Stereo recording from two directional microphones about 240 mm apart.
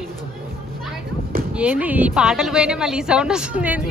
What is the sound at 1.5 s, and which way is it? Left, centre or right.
A woman's voice, centre.